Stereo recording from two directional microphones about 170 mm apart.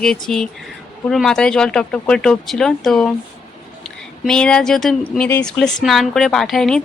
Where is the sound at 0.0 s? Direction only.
5° left (ahead or behind).